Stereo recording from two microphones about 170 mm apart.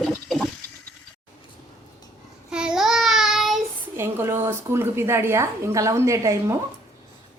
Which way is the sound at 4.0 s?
15° right (ahead or behind).